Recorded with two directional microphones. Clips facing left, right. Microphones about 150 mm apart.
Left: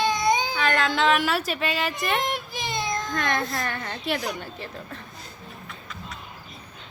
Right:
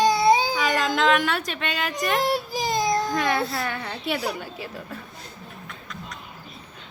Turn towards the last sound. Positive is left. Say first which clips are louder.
# right 1 dB
turn(degrees=0)  # may be behind; listen again after turning